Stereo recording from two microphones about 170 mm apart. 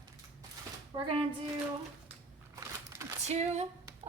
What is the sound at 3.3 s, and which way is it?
Speech, 40° right (ahead or behind).